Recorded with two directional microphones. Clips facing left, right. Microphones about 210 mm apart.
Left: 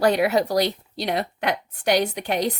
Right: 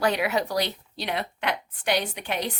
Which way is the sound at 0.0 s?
35° left (ahead or behind).